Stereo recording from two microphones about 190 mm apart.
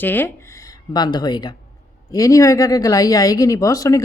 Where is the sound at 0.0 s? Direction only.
10° left (ahead or behind).